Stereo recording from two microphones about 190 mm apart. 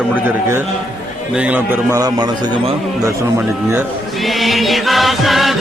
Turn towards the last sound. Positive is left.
turn(degrees=0)  # may be behind; listen again after turning